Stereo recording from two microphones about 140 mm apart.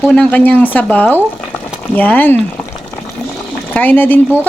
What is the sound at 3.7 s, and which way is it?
Speech, 10° left (ahead or behind).